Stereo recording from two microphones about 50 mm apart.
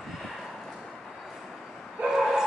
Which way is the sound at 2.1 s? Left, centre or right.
Centre.